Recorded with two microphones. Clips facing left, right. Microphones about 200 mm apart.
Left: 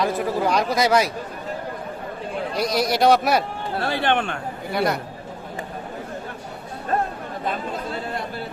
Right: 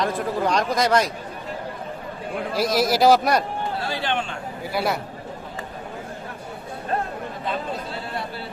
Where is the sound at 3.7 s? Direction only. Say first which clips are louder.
Left 7 dB; 60° left (ahead or behind).